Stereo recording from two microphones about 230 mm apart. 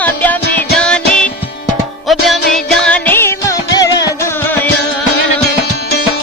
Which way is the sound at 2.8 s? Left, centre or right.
Centre.